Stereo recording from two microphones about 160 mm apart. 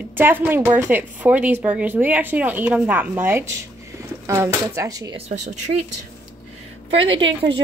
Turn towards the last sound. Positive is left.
turn(degrees=-30)  # may be behind; listen again after turning